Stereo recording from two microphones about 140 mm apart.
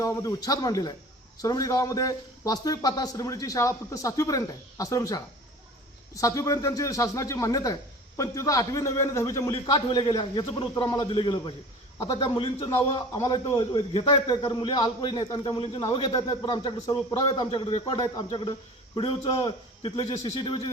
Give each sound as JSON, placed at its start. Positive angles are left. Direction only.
{"t": 0.0, "sound": "a man's voice", "side_deg": 20}